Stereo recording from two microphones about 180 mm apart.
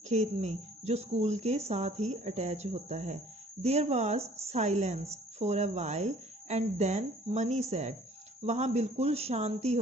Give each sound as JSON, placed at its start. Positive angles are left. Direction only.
{"t": 0.1, "sound": "speech", "side_deg": -40}